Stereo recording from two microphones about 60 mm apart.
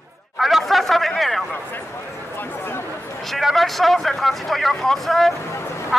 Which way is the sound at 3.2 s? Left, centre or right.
Centre.